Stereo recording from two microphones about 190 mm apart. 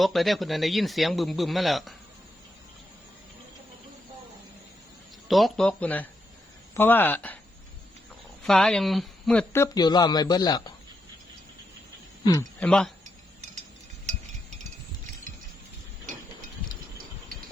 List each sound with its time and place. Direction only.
0.0 s speech: centre (ahead or behind)
5.3 s speech: centre (ahead or behind)
8.4 s speech: 5° left (ahead or behind); by 10.6 s 20° left (ahead or behind)
12.2 s a man's voice: 15° left (ahead or behind)
12.5 s speech: 5° left (ahead or behind)
14.1 s a sound: 35° right (ahead or behind)